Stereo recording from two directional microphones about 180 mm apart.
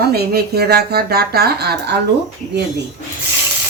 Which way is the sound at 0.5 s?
60° right (ahead or behind).